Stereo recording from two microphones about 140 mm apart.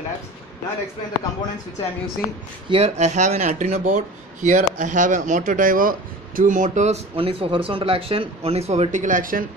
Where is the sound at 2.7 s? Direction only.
50° right (ahead or behind).